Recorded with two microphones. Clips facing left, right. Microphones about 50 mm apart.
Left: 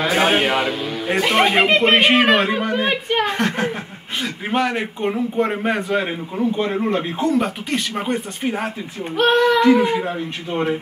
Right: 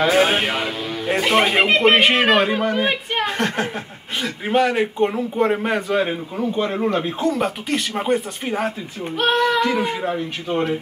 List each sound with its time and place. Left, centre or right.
0.0 s speech: centre
7.3 s speech: centre